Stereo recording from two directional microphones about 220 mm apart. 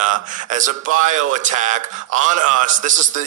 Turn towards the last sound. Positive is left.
turn(degrees=-35)  # may be behind; listen again after turning